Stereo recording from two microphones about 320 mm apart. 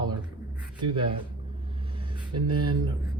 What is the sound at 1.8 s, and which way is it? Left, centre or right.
Vehicle, centre.